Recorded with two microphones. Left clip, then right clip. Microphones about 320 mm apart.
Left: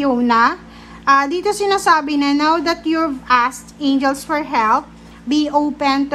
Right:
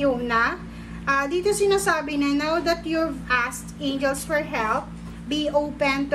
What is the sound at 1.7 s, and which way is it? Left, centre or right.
A woman's voice, centre.